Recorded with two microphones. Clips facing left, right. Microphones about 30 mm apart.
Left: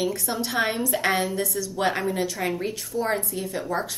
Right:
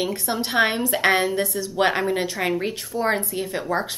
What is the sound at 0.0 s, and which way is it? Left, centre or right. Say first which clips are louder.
A woman's voice: right 2 dB; right.